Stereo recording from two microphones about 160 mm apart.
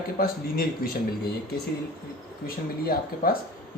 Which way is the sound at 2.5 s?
65° left (ahead or behind).